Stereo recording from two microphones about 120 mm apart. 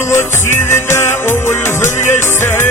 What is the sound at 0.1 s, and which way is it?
Music, 20° left (ahead or behind).